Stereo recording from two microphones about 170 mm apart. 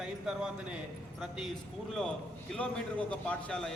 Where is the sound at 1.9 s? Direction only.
5° left (ahead or behind).